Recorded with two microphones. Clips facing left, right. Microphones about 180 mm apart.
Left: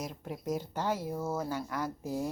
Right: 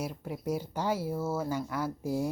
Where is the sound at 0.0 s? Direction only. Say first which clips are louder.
Right 3 dB; 10° right (ahead or behind).